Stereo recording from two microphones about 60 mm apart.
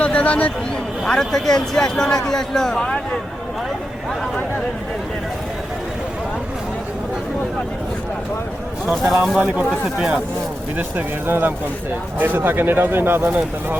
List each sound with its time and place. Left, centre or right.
0.0 s a sound: left
1.0 s speech: centre
8.9 s speech: centre
9.4 s speech: right
10.8 s speech: right